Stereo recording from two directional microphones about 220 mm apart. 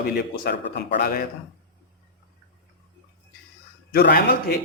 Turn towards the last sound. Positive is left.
turn(degrees=45)  # may be behind; listen again after turning